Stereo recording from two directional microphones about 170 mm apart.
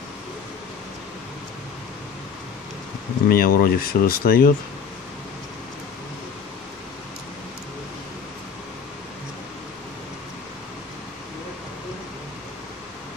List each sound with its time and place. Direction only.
3.3 s speech: 60° left (ahead or behind)